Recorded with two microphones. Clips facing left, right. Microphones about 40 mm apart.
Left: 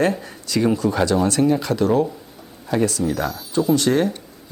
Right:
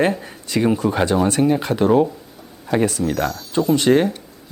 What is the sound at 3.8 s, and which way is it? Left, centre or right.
Speech, right.